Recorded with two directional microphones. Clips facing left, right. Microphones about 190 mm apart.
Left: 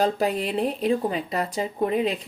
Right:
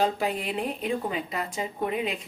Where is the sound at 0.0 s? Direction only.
40° left (ahead or behind).